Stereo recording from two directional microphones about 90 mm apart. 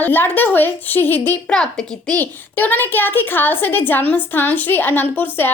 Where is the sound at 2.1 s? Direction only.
20° left (ahead or behind).